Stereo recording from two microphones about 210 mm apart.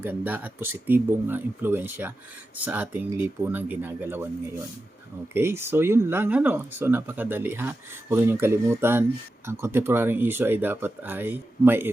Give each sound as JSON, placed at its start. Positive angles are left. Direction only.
{"t": 0.0, "sound": "speech", "side_deg": -10}
{"t": 5.3, "sound": "speech", "side_deg": -10}